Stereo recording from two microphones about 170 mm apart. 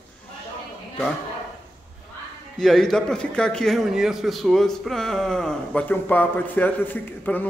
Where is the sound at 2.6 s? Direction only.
5° left (ahead or behind).